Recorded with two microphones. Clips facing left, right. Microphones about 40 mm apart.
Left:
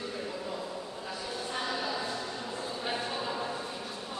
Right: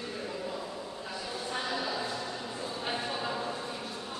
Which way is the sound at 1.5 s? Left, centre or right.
Centre.